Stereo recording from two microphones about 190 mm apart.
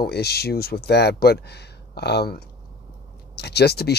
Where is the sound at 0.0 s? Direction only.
55° left (ahead or behind).